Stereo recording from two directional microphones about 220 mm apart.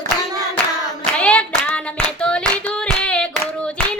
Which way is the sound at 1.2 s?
5° left (ahead or behind).